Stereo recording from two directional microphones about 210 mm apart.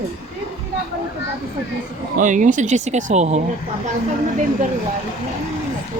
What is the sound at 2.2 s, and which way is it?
Speech, 35° right (ahead or behind).